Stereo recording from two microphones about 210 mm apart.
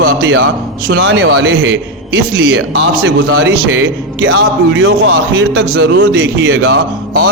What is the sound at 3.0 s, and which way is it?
A man's voice, 65° right (ahead or behind).